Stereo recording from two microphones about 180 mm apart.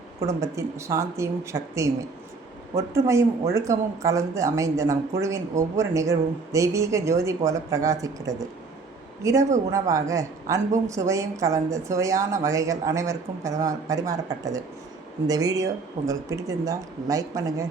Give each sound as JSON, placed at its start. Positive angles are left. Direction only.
{"t": 0.2, "sound": "a woman's voice", "side_deg": -15}